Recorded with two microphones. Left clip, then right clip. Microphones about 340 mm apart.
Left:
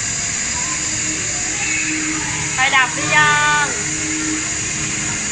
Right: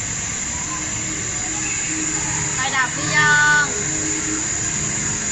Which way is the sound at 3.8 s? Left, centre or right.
Right.